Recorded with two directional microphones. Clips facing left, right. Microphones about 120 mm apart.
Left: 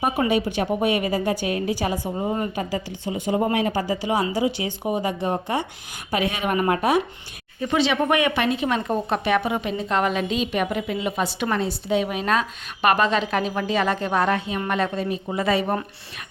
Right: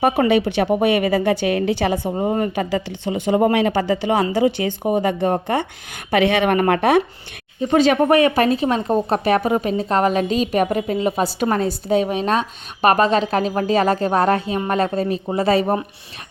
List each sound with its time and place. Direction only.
0.0 s a woman's voice: 65° right (ahead or behind)
2.1 s speech: 45° right (ahead or behind)
2.6 s speech: 75° right (ahead or behind); by 5.6 s 55° right (ahead or behind)
6.1 s speech: 70° right (ahead or behind)
7.7 s speech: 45° right (ahead or behind)
8.0 s a woman's voice: 35° right (ahead or behind)